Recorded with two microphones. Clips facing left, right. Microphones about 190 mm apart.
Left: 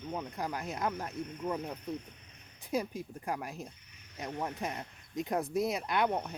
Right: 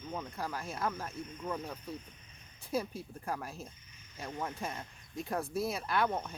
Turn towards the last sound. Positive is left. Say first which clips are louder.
# left 2 dB
turn(degrees=15)  # may be behind; listen again after turning